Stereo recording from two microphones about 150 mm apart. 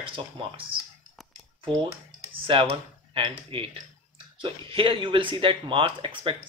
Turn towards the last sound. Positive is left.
turn(degrees=-35)  # may be behind; listen again after turning